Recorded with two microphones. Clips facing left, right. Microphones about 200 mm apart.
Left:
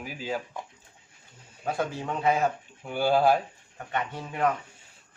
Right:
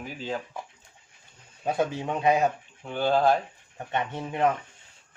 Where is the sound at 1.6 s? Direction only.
20° right (ahead or behind).